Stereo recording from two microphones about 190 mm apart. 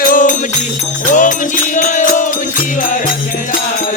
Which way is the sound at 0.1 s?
45° left (ahead or behind).